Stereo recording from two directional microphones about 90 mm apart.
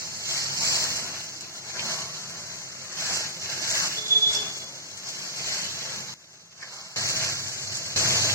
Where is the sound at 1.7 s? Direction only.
35° left (ahead or behind).